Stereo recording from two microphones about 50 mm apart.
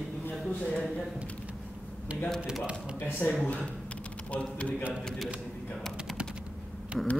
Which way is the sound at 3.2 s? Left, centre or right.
Left.